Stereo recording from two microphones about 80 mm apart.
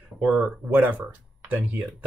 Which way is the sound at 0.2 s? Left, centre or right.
Centre.